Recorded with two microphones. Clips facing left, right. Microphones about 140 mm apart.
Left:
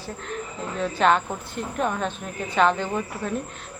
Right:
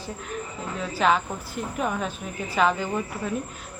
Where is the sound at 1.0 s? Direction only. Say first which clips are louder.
Left 1 dB; centre (ahead or behind).